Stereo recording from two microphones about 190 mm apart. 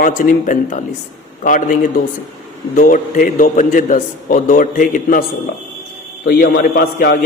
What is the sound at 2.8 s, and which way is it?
A man's voice, 45° left (ahead or behind).